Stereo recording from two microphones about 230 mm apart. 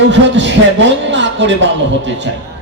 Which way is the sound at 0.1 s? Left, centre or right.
Right.